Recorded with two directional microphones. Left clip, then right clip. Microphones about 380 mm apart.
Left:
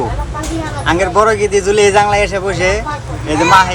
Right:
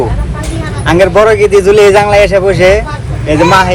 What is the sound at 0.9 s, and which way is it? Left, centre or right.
A man's voice, centre.